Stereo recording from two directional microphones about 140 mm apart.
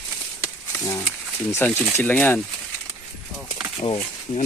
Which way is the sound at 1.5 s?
15° left (ahead or behind).